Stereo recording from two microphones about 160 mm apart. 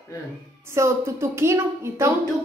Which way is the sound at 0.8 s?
15° right (ahead or behind).